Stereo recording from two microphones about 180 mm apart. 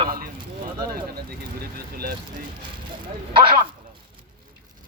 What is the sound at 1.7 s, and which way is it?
Speech, 55° right (ahead or behind).